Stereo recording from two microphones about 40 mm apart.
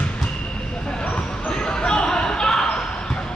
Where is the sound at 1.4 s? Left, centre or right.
Left.